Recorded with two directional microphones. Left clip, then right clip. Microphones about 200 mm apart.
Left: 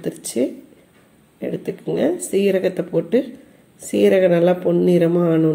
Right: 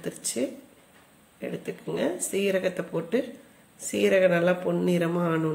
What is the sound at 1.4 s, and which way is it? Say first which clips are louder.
Speech: left 9 dB; 10° left (ahead or behind).